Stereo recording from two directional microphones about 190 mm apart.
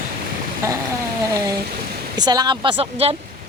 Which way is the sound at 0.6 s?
15° right (ahead or behind).